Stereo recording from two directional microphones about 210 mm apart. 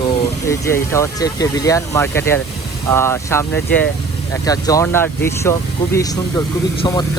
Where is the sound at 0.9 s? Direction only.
15° left (ahead or behind).